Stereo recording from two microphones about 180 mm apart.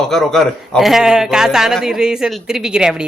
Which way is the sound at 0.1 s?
Centre (ahead or behind).